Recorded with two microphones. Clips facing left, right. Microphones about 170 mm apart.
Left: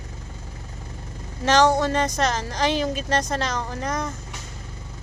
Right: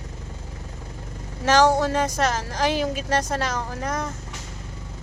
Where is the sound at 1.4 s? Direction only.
10° right (ahead or behind).